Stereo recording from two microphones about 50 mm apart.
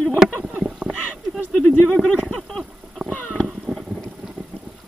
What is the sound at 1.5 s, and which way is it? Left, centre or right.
Speech, centre.